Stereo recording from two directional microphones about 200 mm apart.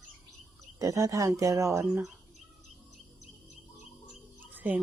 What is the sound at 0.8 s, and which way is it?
Speech, 15° right (ahead or behind).